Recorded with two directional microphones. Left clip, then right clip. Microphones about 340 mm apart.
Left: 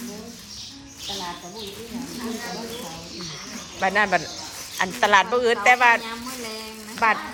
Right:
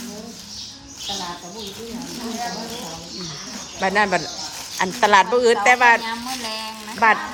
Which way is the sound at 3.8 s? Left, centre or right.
Centre.